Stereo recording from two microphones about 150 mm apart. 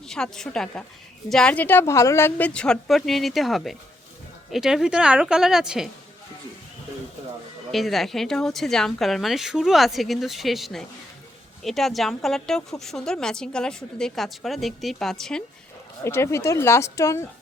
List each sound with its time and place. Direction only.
0.0 s a woman's voice: 5° left (ahead or behind)
7.7 s a woman's voice: centre (ahead or behind)
16.0 s speech: 20° left (ahead or behind)